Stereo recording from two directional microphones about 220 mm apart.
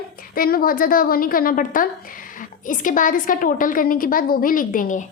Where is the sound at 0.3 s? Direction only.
40° left (ahead or behind).